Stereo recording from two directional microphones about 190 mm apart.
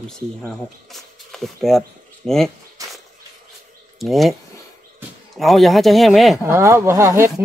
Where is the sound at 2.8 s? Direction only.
15° right (ahead or behind).